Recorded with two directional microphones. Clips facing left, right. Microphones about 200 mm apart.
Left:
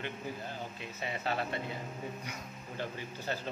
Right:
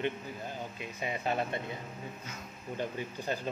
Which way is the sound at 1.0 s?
20° right (ahead or behind).